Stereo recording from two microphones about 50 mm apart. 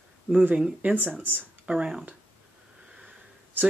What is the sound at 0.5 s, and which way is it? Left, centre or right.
Speech, right.